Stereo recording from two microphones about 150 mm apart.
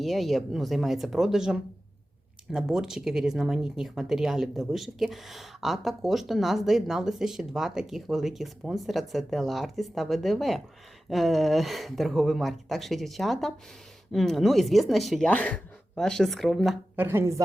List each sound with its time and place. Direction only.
0.0 s speech: centre (ahead or behind)
16.9 s a woman's voice: 15° right (ahead or behind)